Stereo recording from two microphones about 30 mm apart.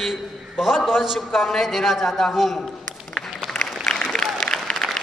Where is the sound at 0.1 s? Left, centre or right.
Centre.